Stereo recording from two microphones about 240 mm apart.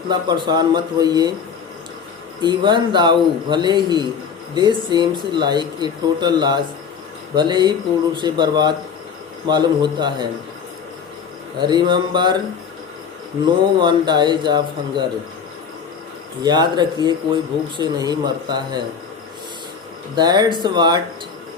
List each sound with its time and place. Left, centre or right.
0.1 s speech: centre
2.4 s speech: centre
11.6 s speech: centre
13.7 s speech: centre
16.4 s speech: centre
20.1 s speech: centre